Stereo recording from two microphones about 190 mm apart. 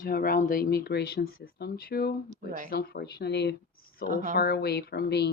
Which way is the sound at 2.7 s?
50° left (ahead or behind).